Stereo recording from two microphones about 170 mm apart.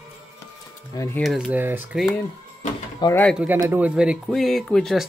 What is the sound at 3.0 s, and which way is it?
Speech, 25° left (ahead or behind).